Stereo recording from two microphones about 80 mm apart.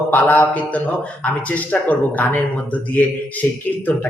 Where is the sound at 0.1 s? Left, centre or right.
Left.